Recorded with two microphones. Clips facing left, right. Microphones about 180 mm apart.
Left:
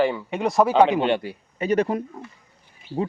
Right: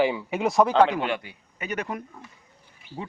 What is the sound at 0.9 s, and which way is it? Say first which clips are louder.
Speech: left 6 dB; 25° left (ahead or behind).